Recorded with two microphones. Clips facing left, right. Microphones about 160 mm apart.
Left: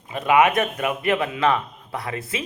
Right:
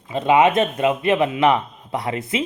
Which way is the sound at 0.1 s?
25° right (ahead or behind).